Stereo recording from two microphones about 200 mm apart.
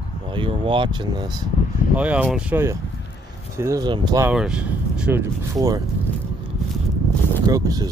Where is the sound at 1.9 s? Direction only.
5° right (ahead or behind).